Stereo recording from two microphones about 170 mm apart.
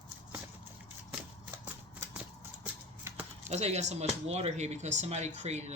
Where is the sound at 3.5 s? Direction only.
40° right (ahead or behind).